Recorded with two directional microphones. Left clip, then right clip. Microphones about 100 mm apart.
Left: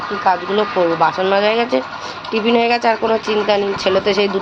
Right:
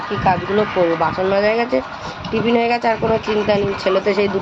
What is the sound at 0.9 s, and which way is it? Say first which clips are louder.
Speech: left 2 dB; centre (ahead or behind).